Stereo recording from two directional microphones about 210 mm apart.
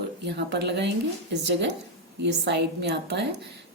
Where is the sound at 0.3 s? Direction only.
55° right (ahead or behind).